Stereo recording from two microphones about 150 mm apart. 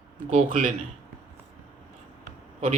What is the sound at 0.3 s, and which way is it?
Speech, 50° right (ahead or behind).